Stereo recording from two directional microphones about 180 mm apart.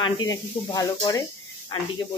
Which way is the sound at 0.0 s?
25° left (ahead or behind).